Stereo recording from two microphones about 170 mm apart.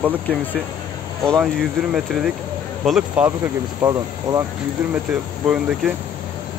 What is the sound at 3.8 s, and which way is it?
Speech, 15° right (ahead or behind).